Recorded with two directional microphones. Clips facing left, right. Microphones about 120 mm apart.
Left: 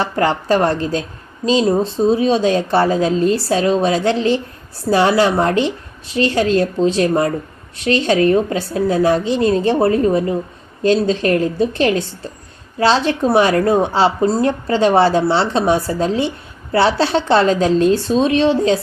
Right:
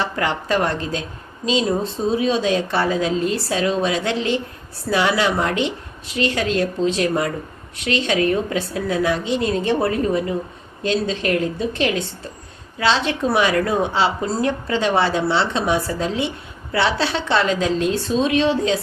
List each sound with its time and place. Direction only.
0.0 s a woman's voice: 35° left (ahead or behind)